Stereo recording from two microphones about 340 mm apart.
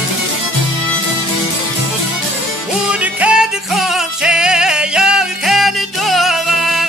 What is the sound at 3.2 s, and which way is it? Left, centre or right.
Music, centre.